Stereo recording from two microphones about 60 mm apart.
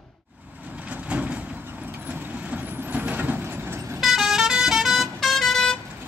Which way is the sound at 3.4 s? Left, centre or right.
Right.